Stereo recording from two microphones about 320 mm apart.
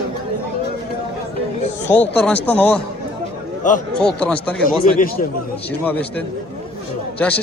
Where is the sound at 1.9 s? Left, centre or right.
Centre.